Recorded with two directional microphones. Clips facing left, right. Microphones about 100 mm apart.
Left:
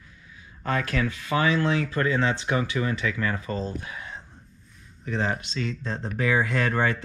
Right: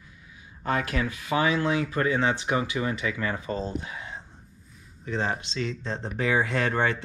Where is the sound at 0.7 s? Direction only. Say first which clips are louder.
Left 1 dB; 20° right (ahead or behind).